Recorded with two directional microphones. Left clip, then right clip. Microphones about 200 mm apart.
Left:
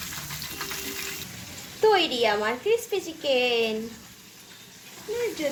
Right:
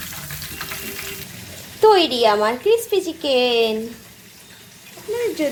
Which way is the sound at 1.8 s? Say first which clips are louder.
Right 7 dB; 25° right (ahead or behind).